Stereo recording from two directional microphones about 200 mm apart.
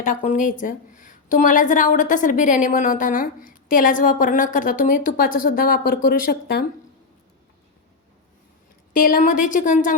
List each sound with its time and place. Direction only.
0.2 s a woman's voice: 35° left (ahead or behind)
8.9 s a woman's voice: 45° left (ahead or behind)